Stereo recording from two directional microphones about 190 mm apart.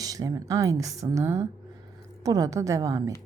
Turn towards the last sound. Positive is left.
turn(degrees=-15)  # may be behind; listen again after turning